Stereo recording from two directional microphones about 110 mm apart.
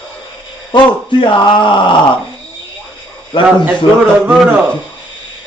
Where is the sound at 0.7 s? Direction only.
45° left (ahead or behind).